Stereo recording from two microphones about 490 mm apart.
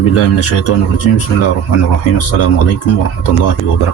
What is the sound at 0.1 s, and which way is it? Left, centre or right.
Speech, left.